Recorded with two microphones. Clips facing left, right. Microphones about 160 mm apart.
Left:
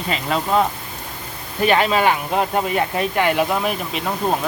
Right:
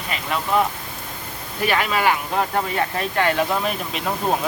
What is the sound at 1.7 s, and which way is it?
Speech, 25° left (ahead or behind).